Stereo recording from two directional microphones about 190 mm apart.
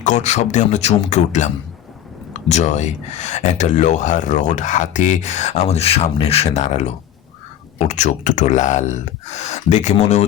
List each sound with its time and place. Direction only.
0.0 s speech: 40° left (ahead or behind)
2.5 s speech: 35° left (ahead or behind)